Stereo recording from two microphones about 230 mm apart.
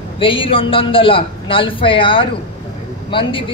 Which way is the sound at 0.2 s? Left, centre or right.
Left.